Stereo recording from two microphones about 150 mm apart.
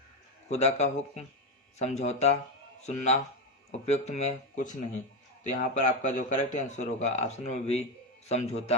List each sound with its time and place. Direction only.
0.4 s a man's voice: 50° left (ahead or behind)